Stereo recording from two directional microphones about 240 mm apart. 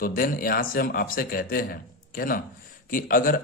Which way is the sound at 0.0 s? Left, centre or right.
Left.